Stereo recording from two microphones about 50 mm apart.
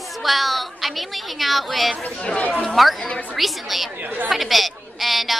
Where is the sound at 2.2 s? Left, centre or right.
Centre.